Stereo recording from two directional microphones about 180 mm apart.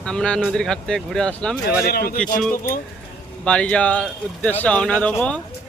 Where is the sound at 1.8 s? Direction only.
55° left (ahead or behind).